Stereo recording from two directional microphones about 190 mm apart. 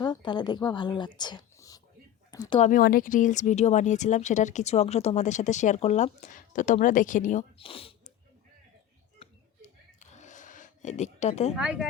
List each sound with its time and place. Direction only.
0.0 s a woman's voice: 25° left (ahead or behind)
2.5 s speech: 40° left (ahead or behind)
7.6 s speech: 30° left (ahead or behind)
10.0 s a sound: 40° left (ahead or behind)
11.5 s speech: 5° right (ahead or behind)